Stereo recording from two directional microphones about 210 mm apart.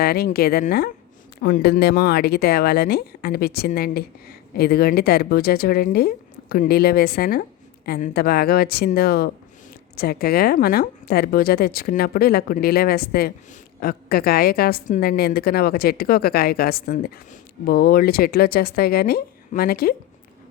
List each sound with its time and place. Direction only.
0.0 s speech: 45° left (ahead or behind)